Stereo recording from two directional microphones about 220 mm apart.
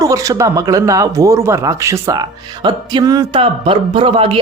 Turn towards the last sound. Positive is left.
turn(degrees=-25)  # may be behind; listen again after turning